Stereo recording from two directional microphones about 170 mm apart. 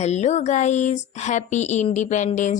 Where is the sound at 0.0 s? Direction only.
40° left (ahead or behind).